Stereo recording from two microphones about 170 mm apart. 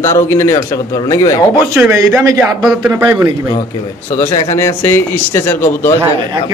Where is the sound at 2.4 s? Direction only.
5° right (ahead or behind).